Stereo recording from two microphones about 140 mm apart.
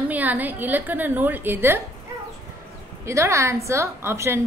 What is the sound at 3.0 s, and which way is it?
A woman's voice, 20° right (ahead or behind).